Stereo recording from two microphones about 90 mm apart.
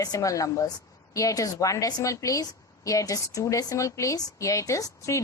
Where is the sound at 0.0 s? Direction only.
40° left (ahead or behind).